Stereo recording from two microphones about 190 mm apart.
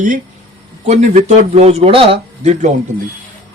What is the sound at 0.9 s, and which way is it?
Speech, 35° right (ahead or behind).